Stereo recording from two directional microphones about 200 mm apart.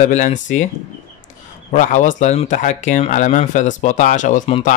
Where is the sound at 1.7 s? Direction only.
40° left (ahead or behind).